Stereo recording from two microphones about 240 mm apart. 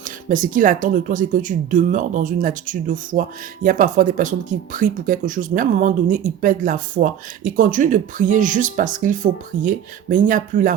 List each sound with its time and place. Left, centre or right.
0.3 s speech: right